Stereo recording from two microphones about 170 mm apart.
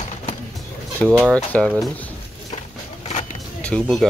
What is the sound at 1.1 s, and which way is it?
Speech, 10° right (ahead or behind).